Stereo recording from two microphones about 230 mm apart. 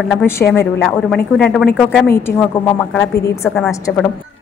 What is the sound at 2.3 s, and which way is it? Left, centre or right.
Speech, left.